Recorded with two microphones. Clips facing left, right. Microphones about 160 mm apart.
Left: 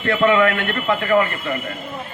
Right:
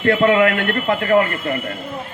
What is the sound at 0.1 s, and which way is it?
Speech, 40° right (ahead or behind).